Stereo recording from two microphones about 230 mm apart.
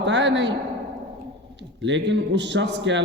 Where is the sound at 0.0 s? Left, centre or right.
Right.